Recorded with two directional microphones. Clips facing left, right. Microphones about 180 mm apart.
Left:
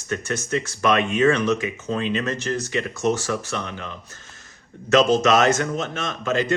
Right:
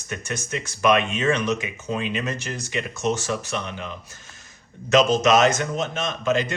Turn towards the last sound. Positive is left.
turn(degrees=-20)  # may be behind; listen again after turning